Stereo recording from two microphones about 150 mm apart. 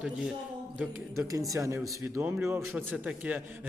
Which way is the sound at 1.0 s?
20° right (ahead or behind).